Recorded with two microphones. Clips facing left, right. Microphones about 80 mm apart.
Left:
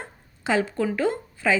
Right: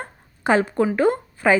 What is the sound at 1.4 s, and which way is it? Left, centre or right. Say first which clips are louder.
Speech: right 5 dB; right.